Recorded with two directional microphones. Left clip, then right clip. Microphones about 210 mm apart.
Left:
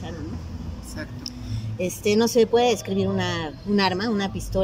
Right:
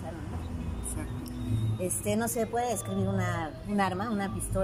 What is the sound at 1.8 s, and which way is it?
Speech, 55° left (ahead or behind).